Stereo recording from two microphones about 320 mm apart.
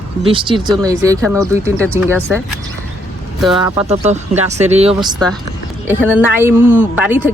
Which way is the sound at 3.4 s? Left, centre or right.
Centre.